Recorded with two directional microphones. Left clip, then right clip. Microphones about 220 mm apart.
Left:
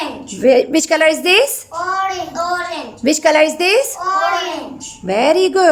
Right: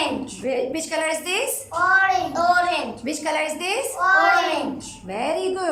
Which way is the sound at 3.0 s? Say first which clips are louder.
Left 15 dB; 45° left (ahead or behind).